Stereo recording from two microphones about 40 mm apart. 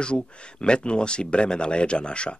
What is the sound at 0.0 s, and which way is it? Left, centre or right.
Speech, left.